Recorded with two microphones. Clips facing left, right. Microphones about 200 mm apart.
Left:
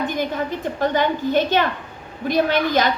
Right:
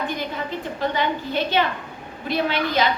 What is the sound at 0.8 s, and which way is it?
A woman's voice, 45° left (ahead or behind).